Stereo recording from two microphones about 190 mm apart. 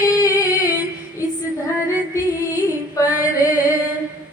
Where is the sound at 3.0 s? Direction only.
15° left (ahead or behind).